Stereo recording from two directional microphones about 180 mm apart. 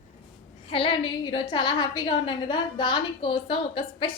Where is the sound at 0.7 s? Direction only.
30° left (ahead or behind).